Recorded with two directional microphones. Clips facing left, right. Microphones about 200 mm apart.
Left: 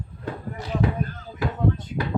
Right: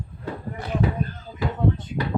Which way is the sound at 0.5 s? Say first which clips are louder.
Right 1 dB; 55° right (ahead or behind).